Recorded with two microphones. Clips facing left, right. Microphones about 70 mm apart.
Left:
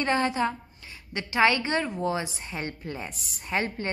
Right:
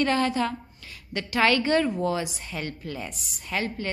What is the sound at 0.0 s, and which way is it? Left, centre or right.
A woman's voice, left.